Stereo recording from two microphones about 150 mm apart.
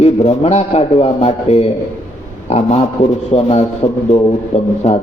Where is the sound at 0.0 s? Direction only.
45° left (ahead or behind).